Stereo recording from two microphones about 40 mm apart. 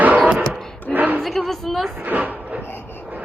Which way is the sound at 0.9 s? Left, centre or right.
Right.